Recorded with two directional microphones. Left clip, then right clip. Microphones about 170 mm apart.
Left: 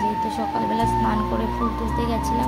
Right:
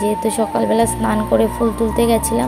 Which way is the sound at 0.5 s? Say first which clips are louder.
Right 3 dB; 30° right (ahead or behind).